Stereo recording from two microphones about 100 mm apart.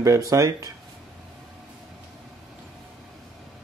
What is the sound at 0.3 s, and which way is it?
Speech, 35° right (ahead or behind).